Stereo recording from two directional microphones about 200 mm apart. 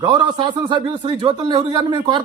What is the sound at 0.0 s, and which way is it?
A man's voice, 20° right (ahead or behind).